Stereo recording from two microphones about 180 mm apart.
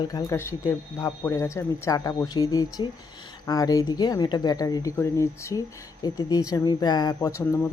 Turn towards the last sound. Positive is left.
turn(degrees=15)  # may be behind; listen again after turning